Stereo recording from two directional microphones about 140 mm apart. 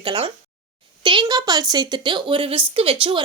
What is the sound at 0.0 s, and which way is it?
Speech, 35° right (ahead or behind).